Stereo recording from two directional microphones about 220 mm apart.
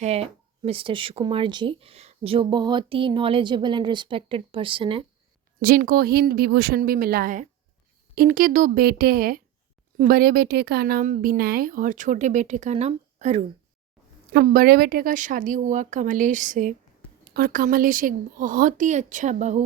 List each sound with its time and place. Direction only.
0.0 s speech: 30° right (ahead or behind)
5.5 s a woman's voice: 40° right (ahead or behind)
14.3 s a woman's voice: 40° right (ahead or behind)